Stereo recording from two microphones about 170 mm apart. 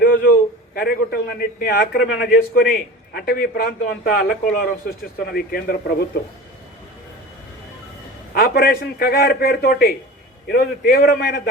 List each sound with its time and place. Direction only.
0.0 s a man's voice: 60° left (ahead or behind)
8.4 s a man's voice: 60° left (ahead or behind)